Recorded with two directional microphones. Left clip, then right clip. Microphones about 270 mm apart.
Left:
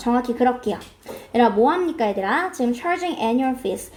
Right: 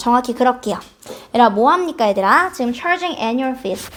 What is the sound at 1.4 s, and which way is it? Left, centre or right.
A woman's voice, right.